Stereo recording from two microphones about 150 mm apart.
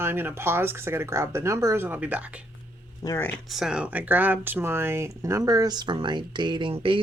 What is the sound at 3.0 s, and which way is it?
Speech, 25° left (ahead or behind).